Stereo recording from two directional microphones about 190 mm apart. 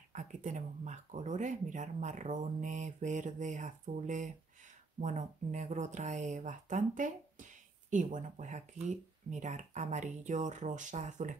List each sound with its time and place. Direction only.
0.1 s speech: 40° right (ahead or behind)